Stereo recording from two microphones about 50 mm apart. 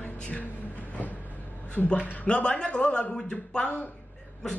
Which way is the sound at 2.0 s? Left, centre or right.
Left.